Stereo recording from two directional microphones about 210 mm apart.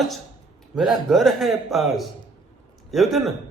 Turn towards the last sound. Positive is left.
turn(degrees=0)  # may be behind; listen again after turning